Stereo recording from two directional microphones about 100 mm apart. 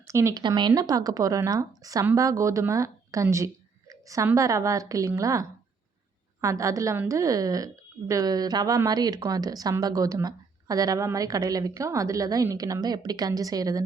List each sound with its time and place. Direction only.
0.1 s speech: 30° right (ahead or behind)
0.3 s a woman's voice: 50° right (ahead or behind)